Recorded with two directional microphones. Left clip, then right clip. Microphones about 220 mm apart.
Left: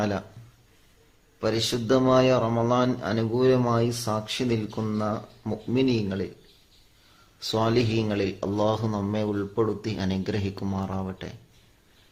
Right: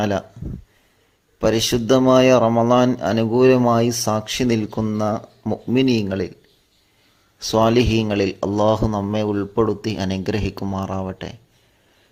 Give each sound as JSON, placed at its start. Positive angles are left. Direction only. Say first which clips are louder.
{"t": 0.0, "sound": "a man's voice", "louder": "right 7 dB", "side_deg": -25}
{"t": 1.4, "sound": "a man's voice", "louder": "right 8 dB", "side_deg": -30}
{"t": 7.3, "sound": "a man's voice", "louder": "right 8 dB", "side_deg": -25}